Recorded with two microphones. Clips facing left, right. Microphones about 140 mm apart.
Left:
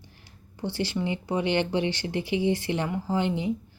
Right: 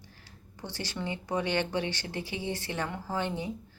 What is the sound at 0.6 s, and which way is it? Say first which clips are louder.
Speech: left 8 dB; 10° left (ahead or behind).